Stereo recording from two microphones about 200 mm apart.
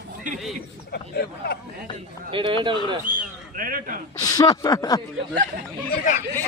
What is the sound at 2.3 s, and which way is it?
Speech, 25° right (ahead or behind).